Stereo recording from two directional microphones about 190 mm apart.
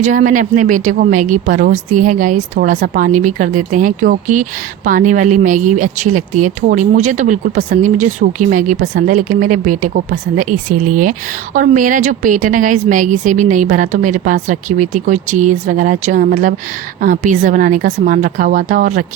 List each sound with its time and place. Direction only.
0.0 s speech: 45° right (ahead or behind)